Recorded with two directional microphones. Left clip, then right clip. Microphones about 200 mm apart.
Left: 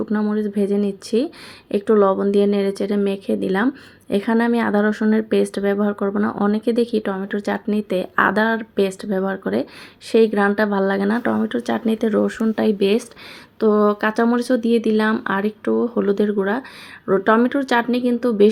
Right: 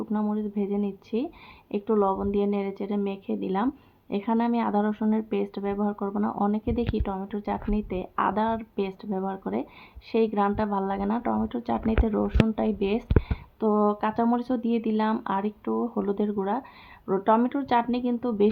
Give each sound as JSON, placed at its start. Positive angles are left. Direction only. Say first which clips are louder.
{"t": 0.1, "sound": "speech", "louder": "left 8 dB", "side_deg": 10}